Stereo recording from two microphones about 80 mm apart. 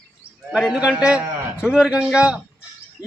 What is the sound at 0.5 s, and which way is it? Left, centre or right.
A man's voice, centre.